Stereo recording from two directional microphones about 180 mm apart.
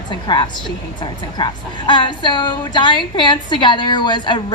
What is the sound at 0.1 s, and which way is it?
A woman's voice, 25° left (ahead or behind).